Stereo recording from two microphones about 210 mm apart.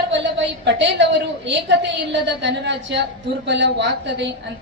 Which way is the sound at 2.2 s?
55° right (ahead or behind).